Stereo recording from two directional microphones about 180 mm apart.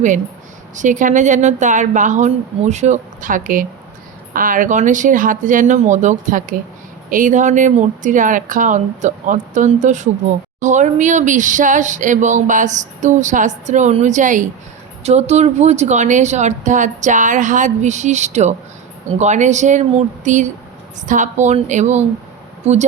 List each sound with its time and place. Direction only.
0.8 s speech: 45° right (ahead or behind)